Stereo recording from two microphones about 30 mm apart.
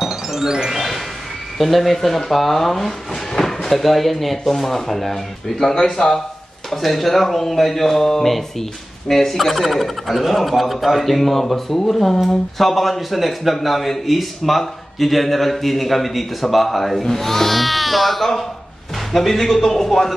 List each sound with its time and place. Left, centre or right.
0.1 s music: centre
0.7 s a sound: centre
1.6 s a man's voice: centre
6.7 s a man's voice: centre